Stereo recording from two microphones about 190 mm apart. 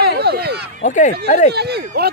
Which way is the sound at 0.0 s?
55° right (ahead or behind).